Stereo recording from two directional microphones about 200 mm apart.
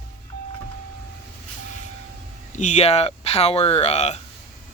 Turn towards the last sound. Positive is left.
turn(degrees=35)  # may be behind; listen again after turning